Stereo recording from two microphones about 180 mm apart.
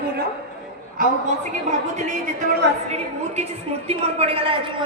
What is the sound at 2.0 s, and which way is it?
A woman's voice, 40° right (ahead or behind).